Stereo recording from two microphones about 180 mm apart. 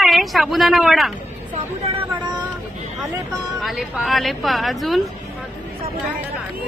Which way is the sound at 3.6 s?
Centre (ahead or behind).